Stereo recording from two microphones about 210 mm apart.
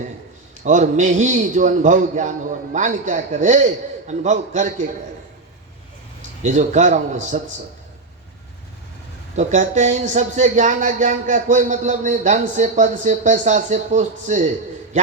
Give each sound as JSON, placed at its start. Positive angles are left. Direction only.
{"t": 0.6, "sound": "a man's voice", "side_deg": -35}
{"t": 6.4, "sound": "a man's voice", "side_deg": -35}
{"t": 9.3, "sound": "a man's voice", "side_deg": -35}